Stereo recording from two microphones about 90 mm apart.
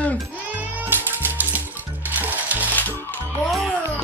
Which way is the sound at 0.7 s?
20° right (ahead or behind).